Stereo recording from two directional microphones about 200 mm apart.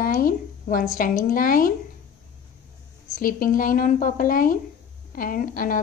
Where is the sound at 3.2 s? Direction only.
45° left (ahead or behind).